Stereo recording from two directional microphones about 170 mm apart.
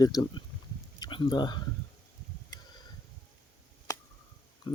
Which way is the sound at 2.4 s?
25° left (ahead or behind).